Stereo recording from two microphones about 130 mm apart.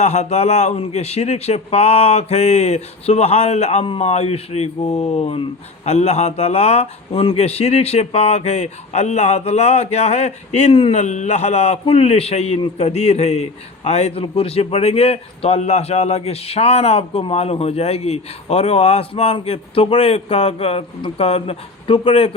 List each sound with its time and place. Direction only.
0.0 s a man's voice: 60° left (ahead or behind); by 11.0 s 45° left (ahead or behind)
11.0 s a man's voice: 65° left (ahead or behind); by 22.3 s 45° left (ahead or behind)